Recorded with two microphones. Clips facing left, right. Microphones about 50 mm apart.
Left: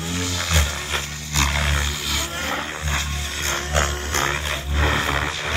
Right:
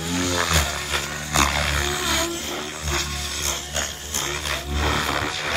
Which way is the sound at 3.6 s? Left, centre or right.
Left.